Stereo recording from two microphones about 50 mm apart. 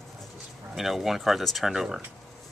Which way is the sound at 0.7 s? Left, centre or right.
Centre.